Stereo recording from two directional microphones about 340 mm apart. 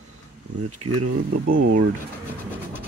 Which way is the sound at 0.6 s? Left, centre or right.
Right.